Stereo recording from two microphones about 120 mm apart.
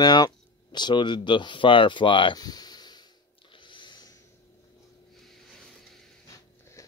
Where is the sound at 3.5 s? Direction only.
45° left (ahead or behind).